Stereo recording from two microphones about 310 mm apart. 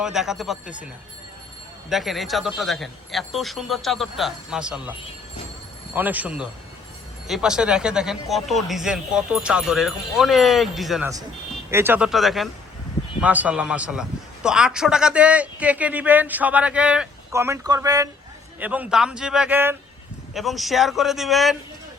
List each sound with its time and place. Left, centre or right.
0.0 s a man's voice: centre
1.9 s a man's voice: centre